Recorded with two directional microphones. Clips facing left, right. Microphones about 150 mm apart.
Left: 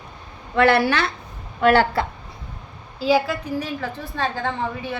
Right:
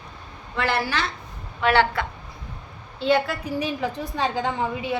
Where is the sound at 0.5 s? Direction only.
60° left (ahead or behind).